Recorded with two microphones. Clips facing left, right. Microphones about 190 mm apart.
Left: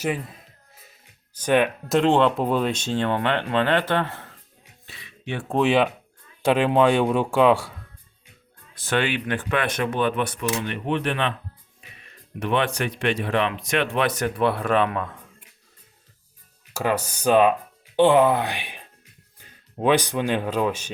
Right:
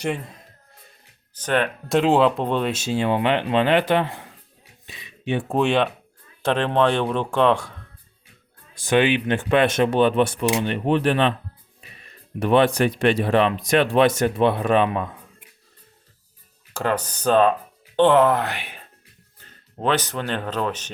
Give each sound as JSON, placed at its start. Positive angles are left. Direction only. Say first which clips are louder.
{"t": 1.4, "sound": "speech", "louder": "left 3 dB", "side_deg": 10}
{"t": 1.9, "sound": "speech", "louder": "right 2 dB", "side_deg": -5}
{"t": 4.9, "sound": "a sound", "louder": "right 6 dB", "side_deg": -15}
{"t": 5.5, "sound": "speech", "louder": "left 2 dB", "side_deg": 0}
{"t": 8.7, "sound": "speech", "louder": "right 5 dB", "side_deg": -15}
{"t": 12.4, "sound": "speech", "louder": "right 6 dB", "side_deg": -35}
{"t": 16.7, "sound": "speech", "louder": "even", "side_deg": 10}